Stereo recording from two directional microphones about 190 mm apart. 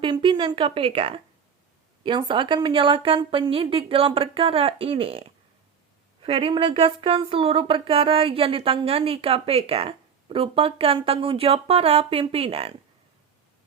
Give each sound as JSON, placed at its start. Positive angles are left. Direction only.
{"t": 0.0, "sound": "a woman's voice", "side_deg": -25}